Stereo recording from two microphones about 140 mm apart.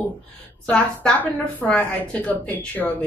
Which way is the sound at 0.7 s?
10° left (ahead or behind).